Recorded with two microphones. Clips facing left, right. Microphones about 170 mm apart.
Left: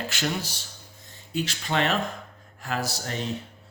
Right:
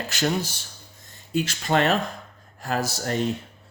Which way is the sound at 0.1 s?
40° right (ahead or behind).